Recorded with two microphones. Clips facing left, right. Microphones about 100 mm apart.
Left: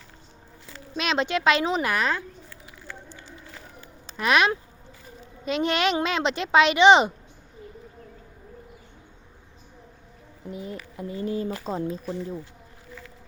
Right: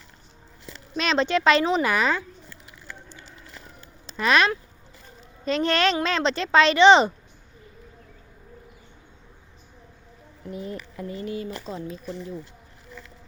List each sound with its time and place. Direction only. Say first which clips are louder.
0.9 s speech: right 3 dB; 10° left (ahead or behind)
4.2 s a woman's voice: right 1 dB; 10° left (ahead or behind)
10.5 s speech: right 2 dB; 20° left (ahead or behind)
11.3 s speech: left 7 dB; 40° left (ahead or behind)